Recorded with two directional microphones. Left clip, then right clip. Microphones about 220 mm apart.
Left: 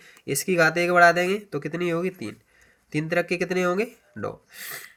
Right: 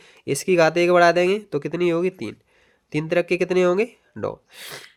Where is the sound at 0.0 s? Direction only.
50° right (ahead or behind).